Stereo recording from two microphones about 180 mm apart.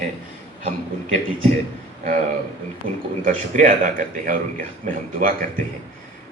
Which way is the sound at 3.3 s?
45° right (ahead or behind).